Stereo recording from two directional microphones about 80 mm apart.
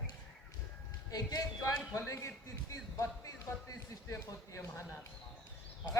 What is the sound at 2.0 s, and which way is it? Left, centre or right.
Speech, left.